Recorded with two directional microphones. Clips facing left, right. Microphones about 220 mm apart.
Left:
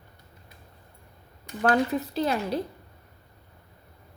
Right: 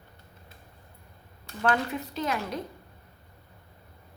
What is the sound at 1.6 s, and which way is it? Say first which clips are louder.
Speech: left 4 dB; 35° left (ahead or behind).